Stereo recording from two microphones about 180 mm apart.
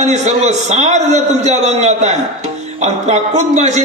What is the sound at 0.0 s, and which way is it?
A man's voice, 40° right (ahead or behind).